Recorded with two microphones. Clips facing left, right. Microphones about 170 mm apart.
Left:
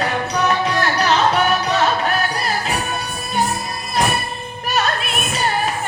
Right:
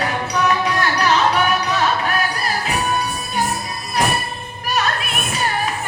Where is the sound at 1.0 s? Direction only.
40° left (ahead or behind).